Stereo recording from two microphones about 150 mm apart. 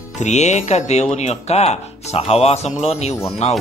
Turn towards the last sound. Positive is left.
turn(degrees=45)  # may be behind; listen again after turning